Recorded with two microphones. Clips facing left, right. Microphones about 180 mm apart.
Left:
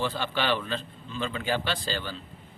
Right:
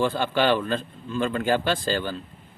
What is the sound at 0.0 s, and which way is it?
Speech, 50° right (ahead or behind).